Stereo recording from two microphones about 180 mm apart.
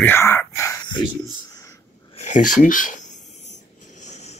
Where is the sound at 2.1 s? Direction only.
40° left (ahead or behind).